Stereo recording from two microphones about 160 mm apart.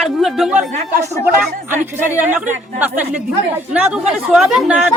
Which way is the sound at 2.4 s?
10° right (ahead or behind).